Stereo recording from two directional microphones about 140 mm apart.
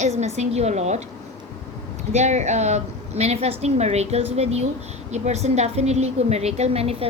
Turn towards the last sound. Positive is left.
turn(degrees=-45)  # may be behind; listen again after turning